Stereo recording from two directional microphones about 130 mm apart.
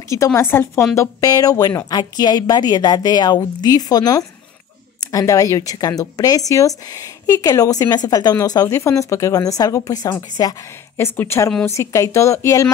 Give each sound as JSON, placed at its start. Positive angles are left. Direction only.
{"t": 0.1, "sound": "a woman's voice", "side_deg": 20}